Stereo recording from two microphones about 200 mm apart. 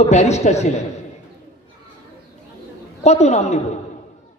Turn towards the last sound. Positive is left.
turn(degrees=35)  # may be behind; listen again after turning